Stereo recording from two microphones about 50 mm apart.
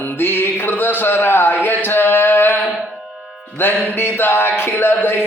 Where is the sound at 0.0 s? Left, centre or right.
Left.